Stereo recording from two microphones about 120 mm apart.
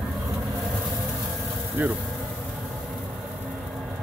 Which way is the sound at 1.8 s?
15° right (ahead or behind).